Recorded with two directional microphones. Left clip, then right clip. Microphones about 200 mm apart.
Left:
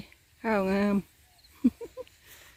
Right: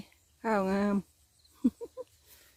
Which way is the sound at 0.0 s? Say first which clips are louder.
Left 2 dB; 5° right (ahead or behind).